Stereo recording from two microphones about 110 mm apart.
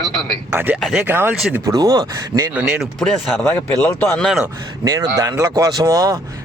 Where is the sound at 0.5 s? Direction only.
15° right (ahead or behind).